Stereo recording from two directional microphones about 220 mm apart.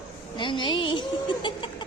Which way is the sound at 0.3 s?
20° left (ahead or behind).